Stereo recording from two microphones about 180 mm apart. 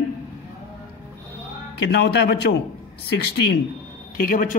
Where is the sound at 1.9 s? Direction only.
65° left (ahead or behind).